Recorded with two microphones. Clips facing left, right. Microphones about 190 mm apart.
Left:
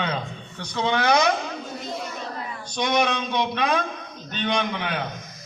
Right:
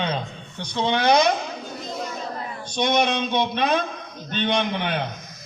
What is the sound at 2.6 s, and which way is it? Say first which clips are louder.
Speech: right 2 dB; 25° right (ahead or behind).